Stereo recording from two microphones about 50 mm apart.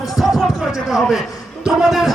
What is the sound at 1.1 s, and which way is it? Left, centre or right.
A man's voice, centre.